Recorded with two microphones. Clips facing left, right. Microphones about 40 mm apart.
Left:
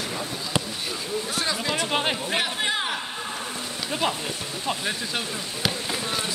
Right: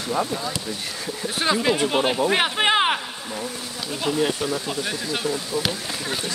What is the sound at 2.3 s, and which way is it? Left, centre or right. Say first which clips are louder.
Speech: right 6 dB; right.